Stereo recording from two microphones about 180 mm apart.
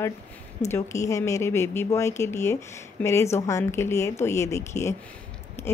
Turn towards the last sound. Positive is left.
turn(degrees=15)  # may be behind; listen again after turning